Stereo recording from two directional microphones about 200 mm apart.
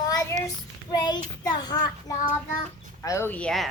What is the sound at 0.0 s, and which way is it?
Child singing, 20° left (ahead or behind).